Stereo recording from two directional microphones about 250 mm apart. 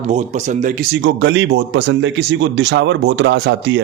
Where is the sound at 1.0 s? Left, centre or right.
Right.